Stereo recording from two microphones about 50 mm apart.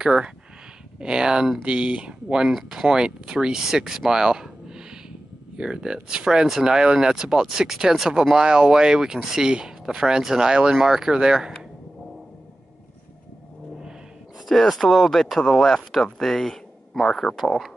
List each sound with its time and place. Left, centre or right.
0.0 s speech: centre
14.5 s speech: centre